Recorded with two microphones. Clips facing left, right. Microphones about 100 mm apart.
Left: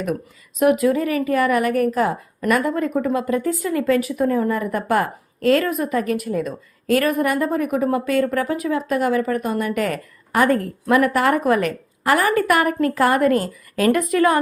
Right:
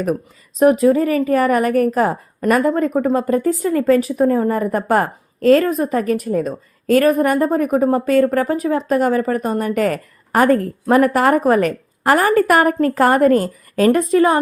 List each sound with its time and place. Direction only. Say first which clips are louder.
0.6 s a woman's voice: right 4 dB; 30° right (ahead or behind)